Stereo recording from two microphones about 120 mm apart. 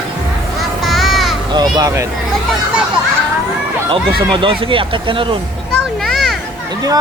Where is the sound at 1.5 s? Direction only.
35° right (ahead or behind).